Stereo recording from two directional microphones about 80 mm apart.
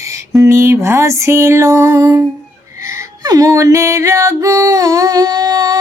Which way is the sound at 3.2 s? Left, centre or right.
Right.